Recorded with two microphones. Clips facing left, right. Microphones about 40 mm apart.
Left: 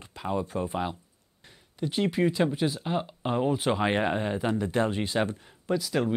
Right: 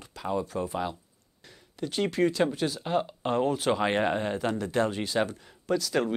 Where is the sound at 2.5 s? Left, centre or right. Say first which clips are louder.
Left 2 dB; centre.